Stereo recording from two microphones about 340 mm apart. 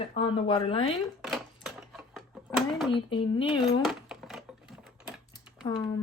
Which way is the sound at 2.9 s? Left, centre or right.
Centre.